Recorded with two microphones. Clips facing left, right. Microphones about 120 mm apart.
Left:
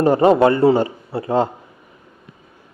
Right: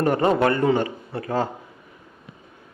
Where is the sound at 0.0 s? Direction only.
25° left (ahead or behind).